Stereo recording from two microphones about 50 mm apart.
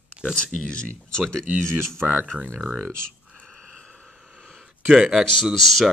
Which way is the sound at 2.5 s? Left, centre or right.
Centre.